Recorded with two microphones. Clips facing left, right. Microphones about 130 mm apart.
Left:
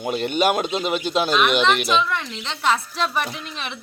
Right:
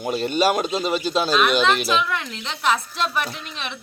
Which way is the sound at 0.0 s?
20° left (ahead or behind).